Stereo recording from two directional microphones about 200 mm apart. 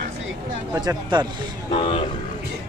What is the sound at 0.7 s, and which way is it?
Speech, 20° right (ahead or behind).